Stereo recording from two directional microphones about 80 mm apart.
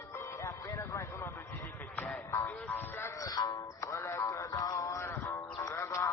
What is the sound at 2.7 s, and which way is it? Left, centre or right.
Music, left.